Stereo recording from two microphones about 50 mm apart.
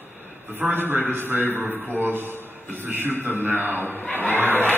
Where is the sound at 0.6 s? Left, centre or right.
Right.